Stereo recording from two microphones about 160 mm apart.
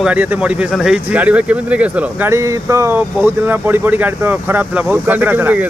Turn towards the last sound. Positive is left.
turn(degrees=-10)  # may be behind; listen again after turning